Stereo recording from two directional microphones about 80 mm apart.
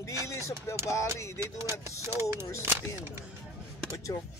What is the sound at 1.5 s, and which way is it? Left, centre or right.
Speech, right.